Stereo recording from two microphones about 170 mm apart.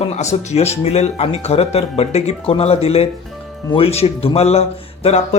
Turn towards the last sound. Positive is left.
turn(degrees=35)  # may be behind; listen again after turning